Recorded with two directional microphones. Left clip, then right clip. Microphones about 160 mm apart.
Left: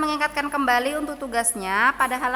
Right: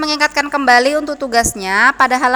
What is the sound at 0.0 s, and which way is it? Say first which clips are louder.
A woman's voice: right 8 dB; 35° right (ahead or behind).